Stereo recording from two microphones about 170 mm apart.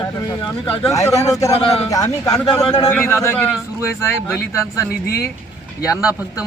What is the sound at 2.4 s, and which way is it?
Speech, 30° left (ahead or behind).